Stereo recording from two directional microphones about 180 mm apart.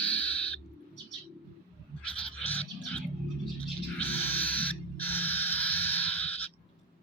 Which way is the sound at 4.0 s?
10° left (ahead or behind).